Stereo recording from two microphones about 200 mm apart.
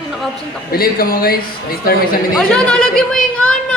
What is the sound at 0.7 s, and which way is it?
A man's voice, 50° left (ahead or behind).